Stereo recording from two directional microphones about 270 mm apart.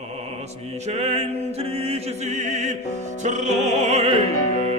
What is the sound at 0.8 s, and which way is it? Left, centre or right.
Music, right.